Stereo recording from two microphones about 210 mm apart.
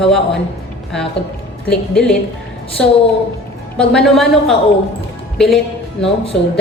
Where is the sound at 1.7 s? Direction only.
5° left (ahead or behind).